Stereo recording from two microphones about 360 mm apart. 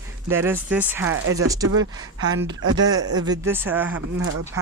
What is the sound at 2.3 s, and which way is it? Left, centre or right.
Speech, right.